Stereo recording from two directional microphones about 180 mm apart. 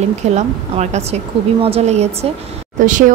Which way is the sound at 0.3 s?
40° right (ahead or behind).